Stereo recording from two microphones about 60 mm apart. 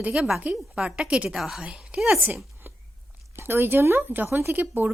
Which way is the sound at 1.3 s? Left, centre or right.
Centre.